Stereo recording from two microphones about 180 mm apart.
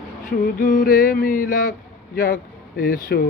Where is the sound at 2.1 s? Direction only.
50° left (ahead or behind).